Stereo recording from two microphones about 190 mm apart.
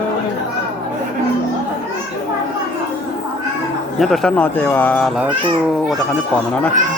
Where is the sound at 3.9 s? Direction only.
Centre (ahead or behind).